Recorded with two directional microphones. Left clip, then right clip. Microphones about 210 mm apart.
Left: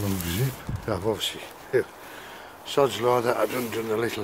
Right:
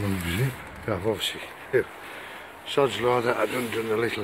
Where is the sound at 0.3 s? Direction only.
5° left (ahead or behind).